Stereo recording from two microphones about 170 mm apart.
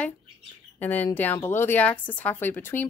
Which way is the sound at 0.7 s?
10° left (ahead or behind).